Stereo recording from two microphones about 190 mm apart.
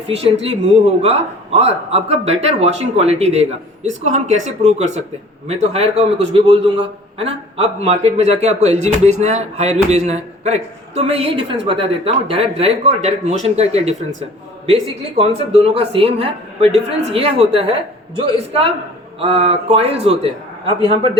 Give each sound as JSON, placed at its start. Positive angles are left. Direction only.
{"t": 0.1, "sound": "a man's voice", "side_deg": -30}
{"t": 15.2, "sound": "a man's voice", "side_deg": -30}